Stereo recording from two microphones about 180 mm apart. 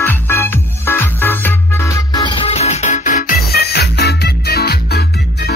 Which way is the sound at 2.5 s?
35° left (ahead or behind).